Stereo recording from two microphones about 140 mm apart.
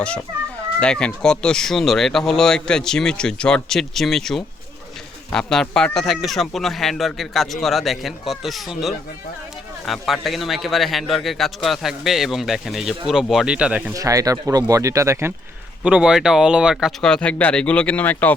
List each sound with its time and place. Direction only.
0.8 s speech: 5° left (ahead or behind); by 13.9 s 10° right (ahead or behind)
13.9 s speech: 25° right (ahead or behind)
15.8 s speech: 5° right (ahead or behind)
17.0 s speech: 5° left (ahead or behind)